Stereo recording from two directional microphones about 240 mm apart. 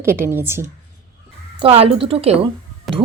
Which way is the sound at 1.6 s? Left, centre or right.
Right.